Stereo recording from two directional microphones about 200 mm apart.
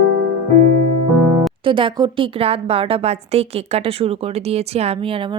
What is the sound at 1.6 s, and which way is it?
A woman's voice, 25° right (ahead or behind).